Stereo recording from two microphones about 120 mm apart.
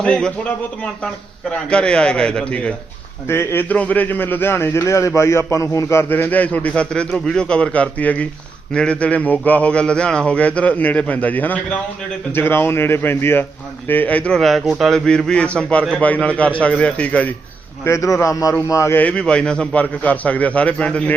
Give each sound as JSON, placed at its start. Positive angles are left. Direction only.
{"t": 0.0, "sound": "a man's voice", "side_deg": 5}
{"t": 3.2, "sound": "a man's voice", "side_deg": 20}
{"t": 17.8, "sound": "a man's voice", "side_deg": 25}